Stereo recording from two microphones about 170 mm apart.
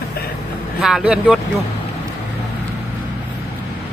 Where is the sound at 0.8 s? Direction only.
5° right (ahead or behind).